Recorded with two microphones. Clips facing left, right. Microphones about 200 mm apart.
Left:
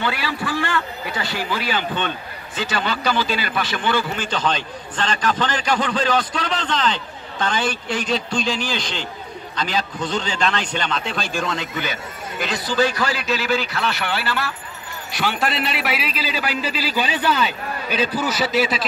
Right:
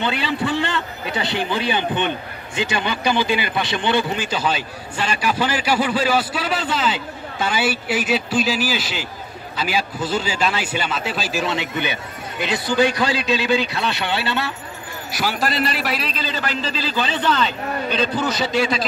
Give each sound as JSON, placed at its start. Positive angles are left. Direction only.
{"t": 0.0, "sound": "a man's voice", "side_deg": -20}
{"t": 12.7, "sound": "a man's voice", "side_deg": -15}
{"t": 15.0, "sound": "a man's voice", "side_deg": -5}